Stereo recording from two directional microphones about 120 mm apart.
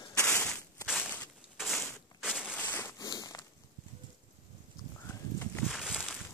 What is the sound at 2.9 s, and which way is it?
Walk, 30° left (ahead or behind).